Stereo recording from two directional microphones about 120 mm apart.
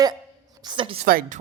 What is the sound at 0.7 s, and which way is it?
Speech, 45° right (ahead or behind).